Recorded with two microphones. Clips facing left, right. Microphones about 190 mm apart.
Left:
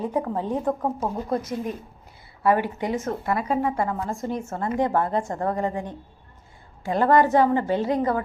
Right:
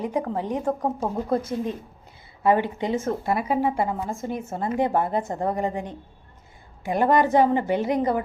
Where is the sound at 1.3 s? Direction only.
25° right (ahead or behind).